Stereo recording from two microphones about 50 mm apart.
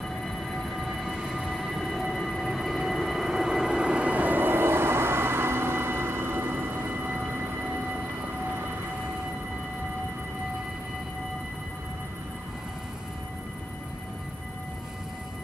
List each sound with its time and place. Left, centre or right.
0.2 s train: centre; by 6.9 s right
6.9 s vehicle: right